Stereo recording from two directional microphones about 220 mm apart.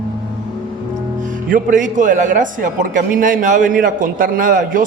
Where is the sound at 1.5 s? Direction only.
35° right (ahead or behind).